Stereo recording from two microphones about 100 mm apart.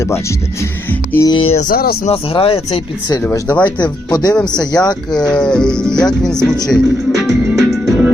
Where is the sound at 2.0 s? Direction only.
70° left (ahead or behind).